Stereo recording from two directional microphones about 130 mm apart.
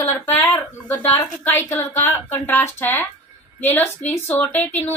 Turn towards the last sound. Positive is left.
turn(degrees=15)  # may be behind; listen again after turning